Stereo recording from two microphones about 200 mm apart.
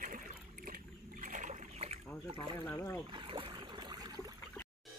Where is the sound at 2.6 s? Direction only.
10° left (ahead or behind).